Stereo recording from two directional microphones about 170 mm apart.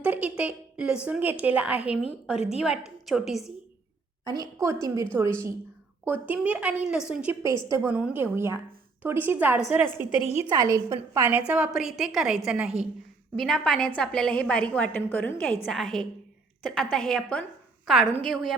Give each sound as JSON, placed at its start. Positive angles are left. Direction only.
{"t": 0.0, "sound": "a woman's voice", "side_deg": -10}
{"t": 4.2, "sound": "a woman's voice", "side_deg": -25}
{"t": 7.4, "sound": "a woman's voice", "side_deg": -15}
{"t": 10.2, "sound": "a woman's voice", "side_deg": 35}
{"t": 10.5, "sound": "a woman's voice", "side_deg": -20}